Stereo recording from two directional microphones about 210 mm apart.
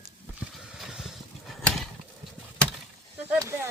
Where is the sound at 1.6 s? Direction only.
Centre (ahead or behind).